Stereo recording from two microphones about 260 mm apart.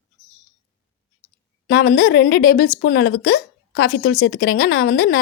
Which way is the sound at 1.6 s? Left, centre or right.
Left.